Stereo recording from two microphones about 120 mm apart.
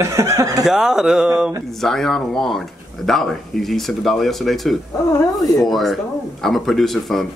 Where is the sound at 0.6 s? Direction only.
5° right (ahead or behind).